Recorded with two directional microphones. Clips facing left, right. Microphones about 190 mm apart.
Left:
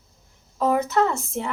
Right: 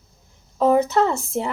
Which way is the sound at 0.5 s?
25° right (ahead or behind).